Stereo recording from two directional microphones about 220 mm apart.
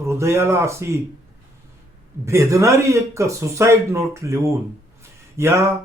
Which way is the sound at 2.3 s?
15° right (ahead or behind).